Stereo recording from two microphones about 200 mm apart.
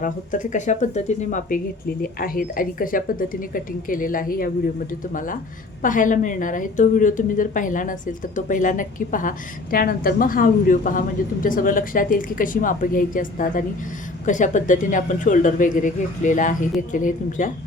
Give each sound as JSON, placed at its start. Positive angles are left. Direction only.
{"t": 0.0, "sound": "a woman's voice", "side_deg": 40}